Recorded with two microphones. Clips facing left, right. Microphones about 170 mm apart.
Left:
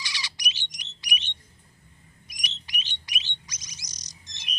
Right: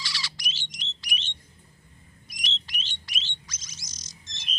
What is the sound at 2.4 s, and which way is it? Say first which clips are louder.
Bird: even; 15° left (ahead or behind).